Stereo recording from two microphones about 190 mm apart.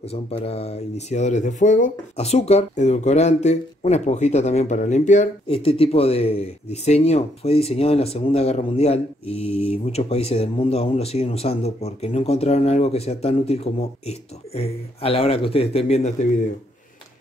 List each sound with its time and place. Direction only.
0.1 s speech: 30° left (ahead or behind)